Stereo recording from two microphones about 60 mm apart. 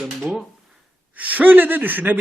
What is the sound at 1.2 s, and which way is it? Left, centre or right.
Speech, right.